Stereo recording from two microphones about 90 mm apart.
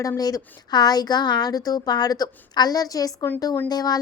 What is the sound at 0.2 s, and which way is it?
A woman's voice, 45° left (ahead or behind).